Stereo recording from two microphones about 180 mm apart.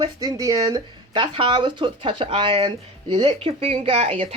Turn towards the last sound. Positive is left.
turn(degrees=-35)  # may be behind; listen again after turning